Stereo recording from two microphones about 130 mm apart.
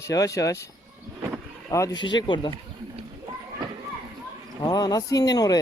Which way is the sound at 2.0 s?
35° left (ahead or behind).